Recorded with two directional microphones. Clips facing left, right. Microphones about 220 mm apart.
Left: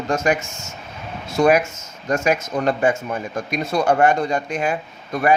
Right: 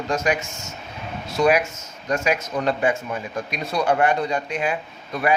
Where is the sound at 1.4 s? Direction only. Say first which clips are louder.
Left 3 dB; 50° left (ahead or behind).